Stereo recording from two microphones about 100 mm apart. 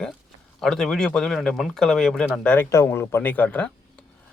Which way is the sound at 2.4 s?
20° left (ahead or behind).